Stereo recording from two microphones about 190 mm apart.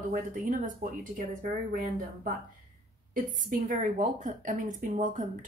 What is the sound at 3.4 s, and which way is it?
Speech, 45° right (ahead or behind).